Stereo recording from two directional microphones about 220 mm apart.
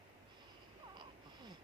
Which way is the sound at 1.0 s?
20° right (ahead or behind).